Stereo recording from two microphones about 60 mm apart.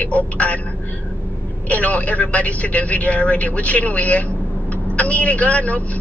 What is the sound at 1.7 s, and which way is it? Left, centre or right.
A man's voice, left.